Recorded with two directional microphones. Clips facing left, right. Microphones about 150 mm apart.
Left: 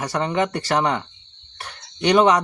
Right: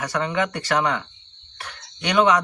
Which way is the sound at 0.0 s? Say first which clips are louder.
Left 2 dB; 35° left (ahead or behind).